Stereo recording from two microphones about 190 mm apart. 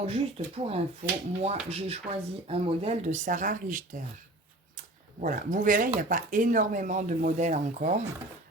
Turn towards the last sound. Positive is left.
turn(degrees=-40)  # may be behind; listen again after turning